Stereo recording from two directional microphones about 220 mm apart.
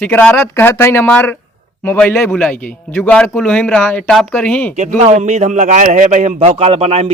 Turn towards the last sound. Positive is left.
turn(degrees=-30)  # may be behind; listen again after turning